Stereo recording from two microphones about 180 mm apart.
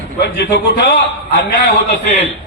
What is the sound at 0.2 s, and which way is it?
Speech, 70° left (ahead or behind).